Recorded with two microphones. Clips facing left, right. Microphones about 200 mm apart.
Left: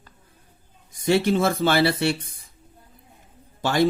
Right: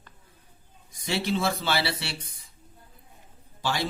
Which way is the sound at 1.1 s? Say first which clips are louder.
Left 7 dB; 50° left (ahead or behind).